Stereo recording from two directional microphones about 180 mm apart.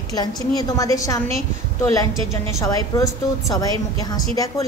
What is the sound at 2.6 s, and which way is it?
Speech, 20° left (ahead or behind).